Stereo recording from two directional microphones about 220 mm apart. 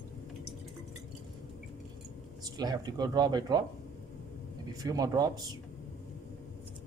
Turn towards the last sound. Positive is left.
turn(degrees=-15)  # may be behind; listen again after turning